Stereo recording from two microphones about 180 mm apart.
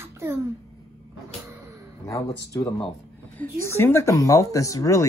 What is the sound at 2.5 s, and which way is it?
Speech, 20° left (ahead or behind).